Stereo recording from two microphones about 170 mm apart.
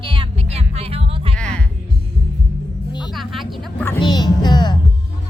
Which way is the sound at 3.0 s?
Centre (ahead or behind).